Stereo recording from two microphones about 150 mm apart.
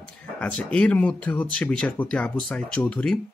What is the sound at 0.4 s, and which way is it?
Speech, 10° left (ahead or behind).